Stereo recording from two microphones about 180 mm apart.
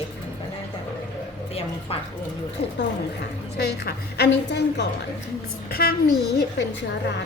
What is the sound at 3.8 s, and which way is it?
A woman's voice, 65° left (ahead or behind).